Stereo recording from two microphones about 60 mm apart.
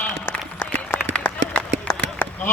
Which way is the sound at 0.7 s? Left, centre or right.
Left.